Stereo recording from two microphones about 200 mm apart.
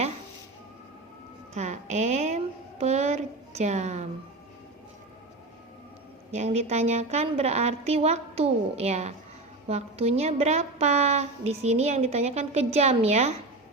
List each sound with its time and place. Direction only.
1.5 s a woman's voice: 35° right (ahead or behind)
6.3 s a woman's voice: 35° right (ahead or behind)